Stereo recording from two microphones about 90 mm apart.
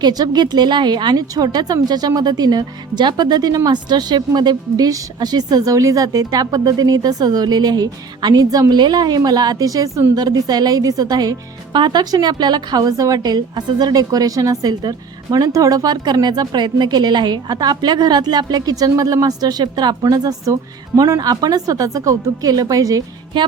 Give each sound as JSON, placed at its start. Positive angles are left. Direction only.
{"t": 0.0, "sound": "a woman's voice", "side_deg": -50}